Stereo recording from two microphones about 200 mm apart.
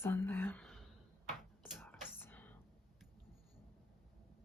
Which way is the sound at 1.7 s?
10° left (ahead or behind).